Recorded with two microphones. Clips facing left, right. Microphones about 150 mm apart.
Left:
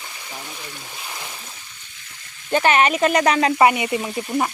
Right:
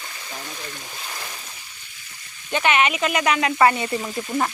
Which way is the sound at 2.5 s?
40° left (ahead or behind).